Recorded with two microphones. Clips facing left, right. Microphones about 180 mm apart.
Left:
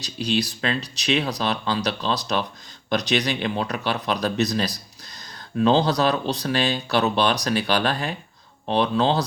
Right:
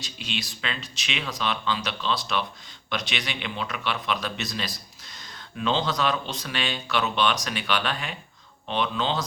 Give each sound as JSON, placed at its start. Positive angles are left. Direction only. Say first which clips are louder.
{"t": 0.0, "sound": "speech", "louder": "left 10 dB", "side_deg": 40}